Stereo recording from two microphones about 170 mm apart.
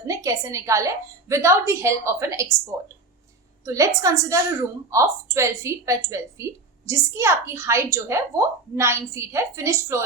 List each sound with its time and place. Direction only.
0.1 s a woman's voice: 20° right (ahead or behind)
3.7 s a woman's voice: 20° right (ahead or behind)